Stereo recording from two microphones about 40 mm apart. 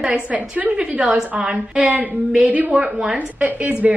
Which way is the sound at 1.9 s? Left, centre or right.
Right.